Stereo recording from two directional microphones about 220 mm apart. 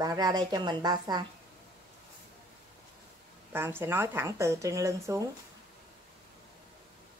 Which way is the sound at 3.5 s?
10° right (ahead or behind).